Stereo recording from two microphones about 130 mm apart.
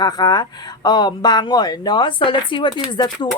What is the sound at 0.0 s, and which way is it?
Speech, 30° left (ahead or behind).